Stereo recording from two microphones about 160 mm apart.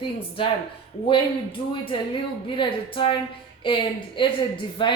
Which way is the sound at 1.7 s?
30° left (ahead or behind).